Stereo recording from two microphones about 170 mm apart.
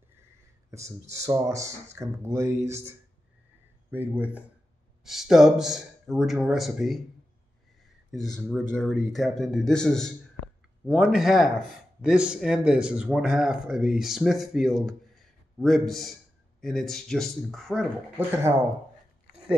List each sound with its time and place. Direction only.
0.7 s speech: 15° right (ahead or behind); by 7.0 s centre (ahead or behind)
8.1 s speech: centre (ahead or behind)